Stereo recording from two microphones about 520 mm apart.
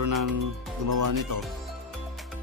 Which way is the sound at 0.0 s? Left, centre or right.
Right.